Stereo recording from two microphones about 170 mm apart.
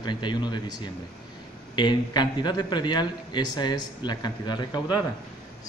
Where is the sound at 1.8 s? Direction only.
25° left (ahead or behind).